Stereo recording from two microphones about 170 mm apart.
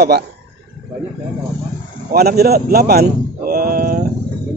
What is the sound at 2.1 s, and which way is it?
Speech, 65° right (ahead or behind).